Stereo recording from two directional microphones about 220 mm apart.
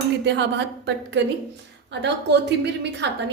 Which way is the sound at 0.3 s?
50° right (ahead or behind).